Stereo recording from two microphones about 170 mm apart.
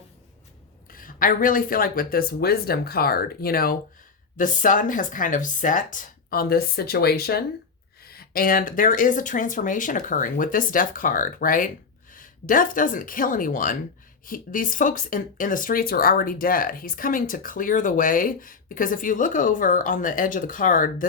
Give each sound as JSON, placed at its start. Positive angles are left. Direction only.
{"t": 0.9, "sound": "speech", "side_deg": 55}
{"t": 4.4, "sound": "speech", "side_deg": 50}